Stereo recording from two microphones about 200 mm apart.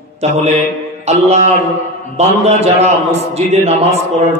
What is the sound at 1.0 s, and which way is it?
Music, 35° right (ahead or behind).